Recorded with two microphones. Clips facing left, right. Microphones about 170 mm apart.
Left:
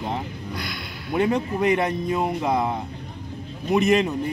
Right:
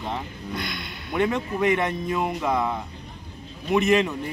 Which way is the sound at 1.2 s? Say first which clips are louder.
Left 1 dB; 35° left (ahead or behind).